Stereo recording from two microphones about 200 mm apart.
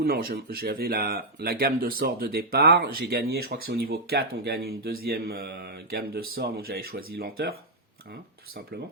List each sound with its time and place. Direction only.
0.0 s speech: 50° right (ahead or behind)